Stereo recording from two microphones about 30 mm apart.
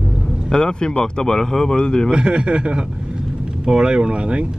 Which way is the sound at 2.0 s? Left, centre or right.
Right.